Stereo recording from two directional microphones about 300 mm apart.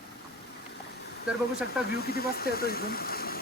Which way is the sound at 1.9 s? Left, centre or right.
Left.